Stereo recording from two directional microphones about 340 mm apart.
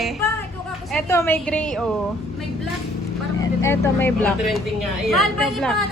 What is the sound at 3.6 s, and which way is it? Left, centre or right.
A woman's voice, centre.